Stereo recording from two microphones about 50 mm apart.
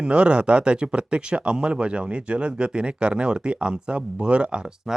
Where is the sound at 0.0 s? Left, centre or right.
Right.